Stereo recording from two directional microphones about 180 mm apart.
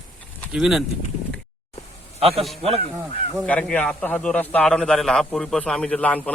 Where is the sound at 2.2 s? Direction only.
30° right (ahead or behind).